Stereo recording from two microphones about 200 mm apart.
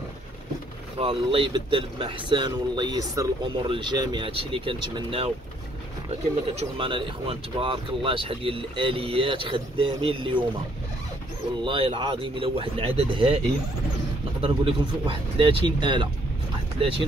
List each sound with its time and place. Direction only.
0.9 s speech: 30° right (ahead or behind)
6.5 s speech: 30° right (ahead or behind)
11.6 s speech: 25° right (ahead or behind)
14.4 s speech: 25° right (ahead or behind)